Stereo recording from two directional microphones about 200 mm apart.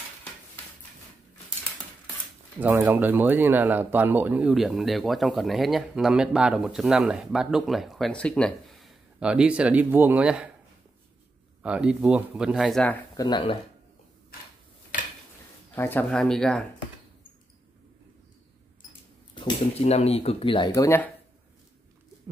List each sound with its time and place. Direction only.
2.6 s speech: 10° right (ahead or behind)
11.6 s speech: 5° right (ahead or behind)
13.1 s speech: 20° left (ahead or behind)
15.7 s speech: 10° left (ahead or behind)
19.3 s speech: 25° left (ahead or behind)